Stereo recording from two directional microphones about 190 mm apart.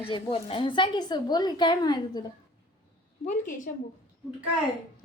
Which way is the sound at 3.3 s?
45° left (ahead or behind).